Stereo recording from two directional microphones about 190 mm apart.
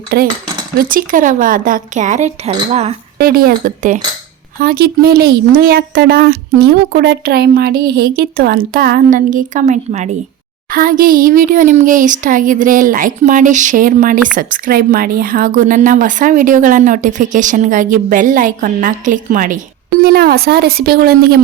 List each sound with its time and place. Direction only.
0.1 s speech: 55° right (ahead or behind); by 2.6 s 35° right (ahead or behind)
3.2 s speech: 50° right (ahead or behind)
10.7 s speech: 50° right (ahead or behind)
20.0 s speech: 60° right (ahead or behind)